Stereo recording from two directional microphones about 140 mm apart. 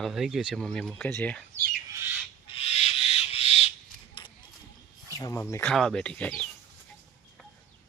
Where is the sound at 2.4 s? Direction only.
40° left (ahead or behind).